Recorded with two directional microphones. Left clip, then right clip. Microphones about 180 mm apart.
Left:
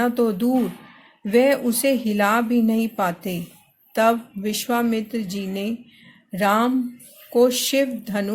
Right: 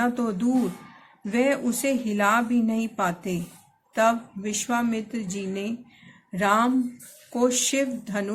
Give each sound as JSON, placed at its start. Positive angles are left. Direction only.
{"t": 0.0, "sound": "speech", "side_deg": 35}